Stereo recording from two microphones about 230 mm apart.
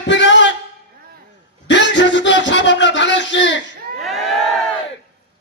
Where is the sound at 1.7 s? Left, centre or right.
Left.